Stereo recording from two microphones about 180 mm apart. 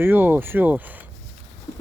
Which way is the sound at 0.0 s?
10° right (ahead or behind).